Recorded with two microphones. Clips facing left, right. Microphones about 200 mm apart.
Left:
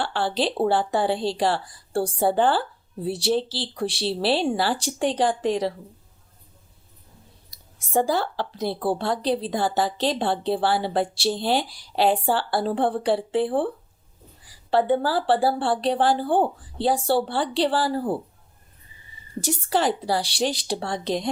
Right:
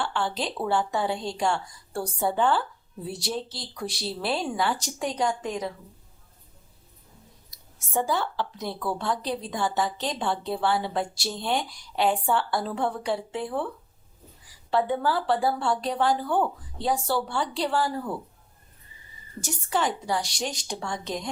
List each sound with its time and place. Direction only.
0.0 s a woman's voice: 35° left (ahead or behind)
7.9 s a woman's voice: 35° left (ahead or behind)
14.7 s a woman's voice: 30° left (ahead or behind)
19.4 s a woman's voice: 35° left (ahead or behind)